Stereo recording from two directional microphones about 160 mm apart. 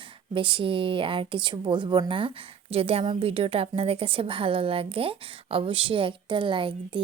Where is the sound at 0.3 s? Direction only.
30° right (ahead or behind).